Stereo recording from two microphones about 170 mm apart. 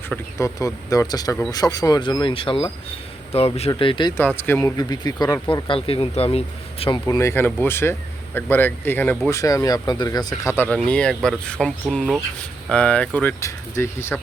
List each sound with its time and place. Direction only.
0.3 s speech: 20° left (ahead or behind)
4.2 s speech: 10° left (ahead or behind)
4.8 s speech: 25° left (ahead or behind)
7.0 s speech: 15° left (ahead or behind)
9.4 s speech: 20° left (ahead or behind)